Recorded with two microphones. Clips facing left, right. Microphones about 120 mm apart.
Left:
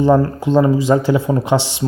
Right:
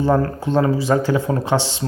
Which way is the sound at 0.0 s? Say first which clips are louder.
Left 4 dB; 15° left (ahead or behind).